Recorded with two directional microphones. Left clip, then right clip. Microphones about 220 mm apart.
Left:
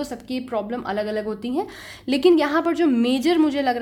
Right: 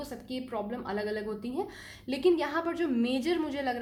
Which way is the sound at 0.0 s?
40° left (ahead or behind).